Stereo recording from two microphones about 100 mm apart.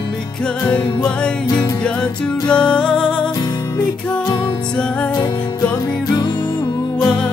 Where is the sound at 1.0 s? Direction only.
10° left (ahead or behind).